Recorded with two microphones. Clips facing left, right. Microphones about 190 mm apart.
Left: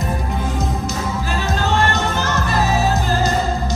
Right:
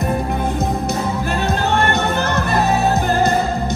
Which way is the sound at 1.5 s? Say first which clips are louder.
Even; 60° right (ahead or behind).